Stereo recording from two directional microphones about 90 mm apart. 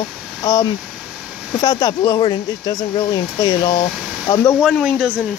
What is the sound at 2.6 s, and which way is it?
Speech, 45° left (ahead or behind).